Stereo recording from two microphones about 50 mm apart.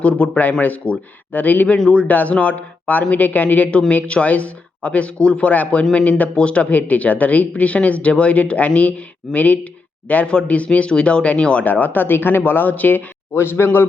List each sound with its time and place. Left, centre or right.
0.0 s speech: left
11.6 s speech: left
13.3 s a man's voice: left